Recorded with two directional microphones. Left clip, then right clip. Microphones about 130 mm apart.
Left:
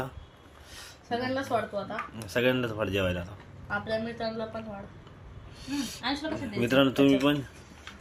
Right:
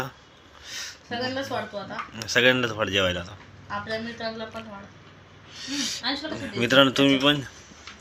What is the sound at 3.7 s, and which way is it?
Speech, 45° left (ahead or behind).